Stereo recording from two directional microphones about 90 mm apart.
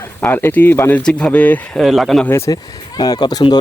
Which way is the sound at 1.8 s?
Centre (ahead or behind).